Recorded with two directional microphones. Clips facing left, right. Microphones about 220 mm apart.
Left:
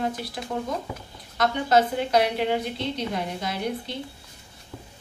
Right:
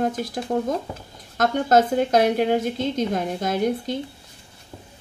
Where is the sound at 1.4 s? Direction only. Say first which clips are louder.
Right 3 dB; 45° right (ahead or behind).